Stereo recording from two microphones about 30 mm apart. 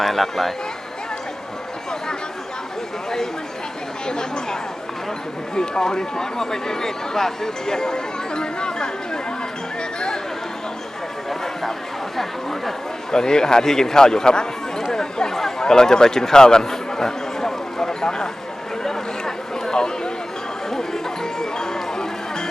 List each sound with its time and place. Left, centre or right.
0.0 s speech: centre
4.0 s speech: left
5.5 s speech: left
12.1 s speech: centre
13.1 s speech: left
14.9 s a sound: centre
20.7 s music: centre